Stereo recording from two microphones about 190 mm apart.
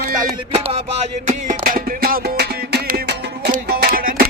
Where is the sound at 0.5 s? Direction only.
30° right (ahead or behind); by 3.5 s 60° right (ahead or behind).